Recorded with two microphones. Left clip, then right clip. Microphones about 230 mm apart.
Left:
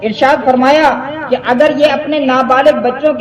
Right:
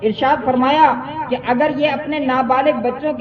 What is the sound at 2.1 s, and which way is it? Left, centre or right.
A woman's voice, centre.